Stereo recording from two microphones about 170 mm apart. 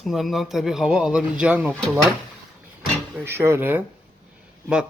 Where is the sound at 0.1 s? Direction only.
Centre (ahead or behind).